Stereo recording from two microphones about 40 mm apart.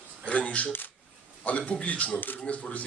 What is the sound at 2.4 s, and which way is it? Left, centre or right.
Speech, left.